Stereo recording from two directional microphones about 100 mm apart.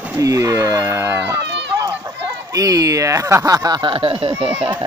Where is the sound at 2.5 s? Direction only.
35° right (ahead or behind).